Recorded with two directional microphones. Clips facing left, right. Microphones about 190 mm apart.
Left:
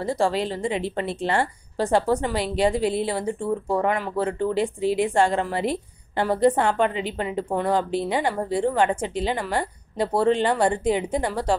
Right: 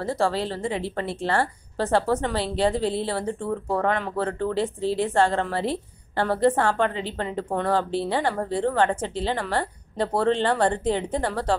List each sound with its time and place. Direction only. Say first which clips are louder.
0.0 s a woman's voice: left 1 dB; 15° left (ahead or behind)